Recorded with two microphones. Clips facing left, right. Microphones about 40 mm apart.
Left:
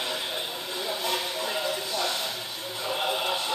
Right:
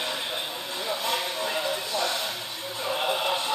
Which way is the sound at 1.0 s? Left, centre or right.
Right.